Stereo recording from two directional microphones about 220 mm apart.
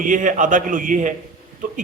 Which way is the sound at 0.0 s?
35° right (ahead or behind).